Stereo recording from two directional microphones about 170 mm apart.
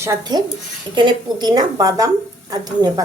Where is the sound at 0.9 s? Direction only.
30° right (ahead or behind).